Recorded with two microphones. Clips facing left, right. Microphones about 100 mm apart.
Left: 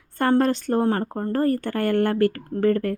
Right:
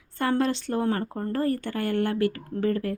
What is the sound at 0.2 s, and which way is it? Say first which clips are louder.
Speech: left 5 dB; 50° left (ahead or behind).